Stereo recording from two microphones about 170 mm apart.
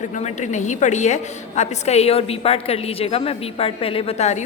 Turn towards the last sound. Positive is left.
turn(degrees=40)  # may be behind; listen again after turning